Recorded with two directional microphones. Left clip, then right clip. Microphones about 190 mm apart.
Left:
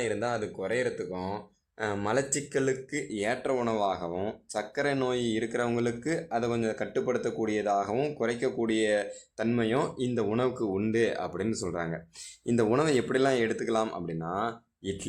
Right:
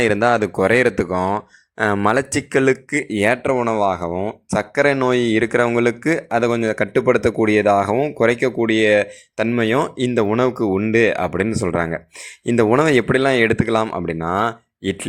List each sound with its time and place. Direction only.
0.0 s speech: 40° right (ahead or behind)